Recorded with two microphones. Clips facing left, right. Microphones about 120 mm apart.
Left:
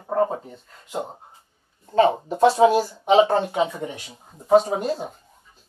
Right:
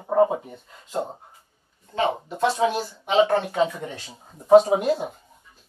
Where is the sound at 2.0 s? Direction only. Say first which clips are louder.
Left 6 dB; 35° left (ahead or behind).